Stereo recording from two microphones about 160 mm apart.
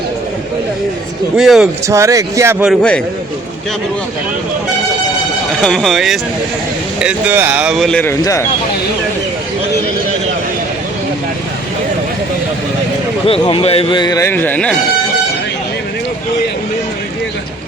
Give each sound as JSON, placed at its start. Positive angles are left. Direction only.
{"t": 1.4, "sound": "speech", "side_deg": -5}
{"t": 1.9, "sound": "speech", "side_deg": -20}
{"t": 2.6, "sound": "a man's voice", "side_deg": 5}
{"t": 5.5, "sound": "speech", "side_deg": 5}
{"t": 8.2, "sound": "a man's voice", "side_deg": 20}
{"t": 13.2, "sound": "a man's voice", "side_deg": 35}